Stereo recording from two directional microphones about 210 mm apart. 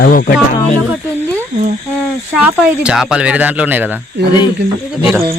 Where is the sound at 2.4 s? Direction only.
5° right (ahead or behind).